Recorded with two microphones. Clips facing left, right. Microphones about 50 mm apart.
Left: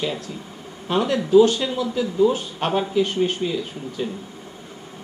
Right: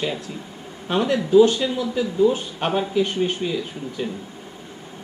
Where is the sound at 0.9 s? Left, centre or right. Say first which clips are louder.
Even; right.